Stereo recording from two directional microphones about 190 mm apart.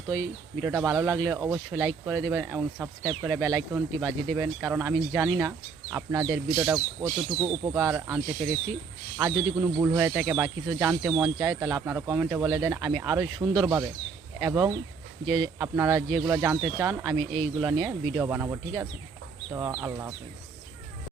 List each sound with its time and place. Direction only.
0.1 s a man's voice: 15° right (ahead or behind)